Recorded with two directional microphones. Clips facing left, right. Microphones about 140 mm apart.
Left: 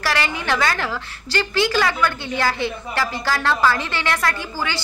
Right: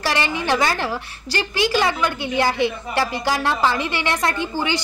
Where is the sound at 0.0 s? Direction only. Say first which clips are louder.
Right 1 dB; 20° right (ahead or behind).